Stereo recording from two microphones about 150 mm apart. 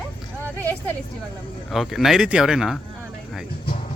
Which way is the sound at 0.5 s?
15° left (ahead or behind).